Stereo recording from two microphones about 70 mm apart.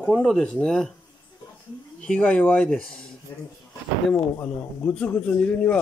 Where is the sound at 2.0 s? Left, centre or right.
Centre.